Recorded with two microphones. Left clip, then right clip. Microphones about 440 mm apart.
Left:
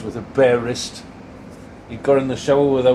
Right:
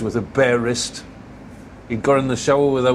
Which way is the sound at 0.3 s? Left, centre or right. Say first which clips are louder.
Left 2 dB; centre.